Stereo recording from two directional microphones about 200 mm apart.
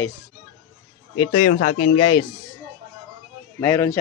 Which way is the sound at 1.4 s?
40° left (ahead or behind).